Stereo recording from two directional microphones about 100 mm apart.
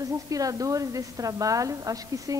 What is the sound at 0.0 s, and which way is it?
A woman's voice, 35° right (ahead or behind).